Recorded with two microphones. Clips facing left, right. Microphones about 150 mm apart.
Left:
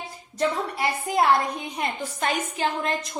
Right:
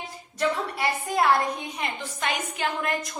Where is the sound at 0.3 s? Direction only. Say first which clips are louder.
Left 1 dB; 25° left (ahead or behind).